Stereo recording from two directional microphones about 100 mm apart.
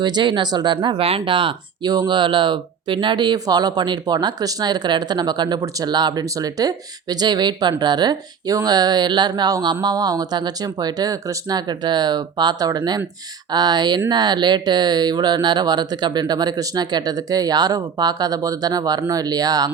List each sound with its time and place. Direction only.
0.0 s speech: 50° right (ahead or behind)
0.9 s speech: 70° right (ahead or behind)
1.9 s speech: 45° right (ahead or behind)